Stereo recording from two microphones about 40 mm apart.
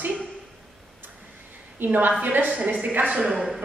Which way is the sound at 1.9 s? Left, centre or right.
Right.